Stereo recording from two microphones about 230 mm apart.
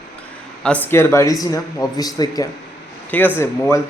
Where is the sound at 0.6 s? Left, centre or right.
Centre.